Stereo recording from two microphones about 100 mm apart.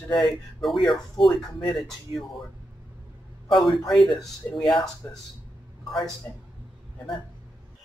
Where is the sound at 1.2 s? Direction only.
55° left (ahead or behind).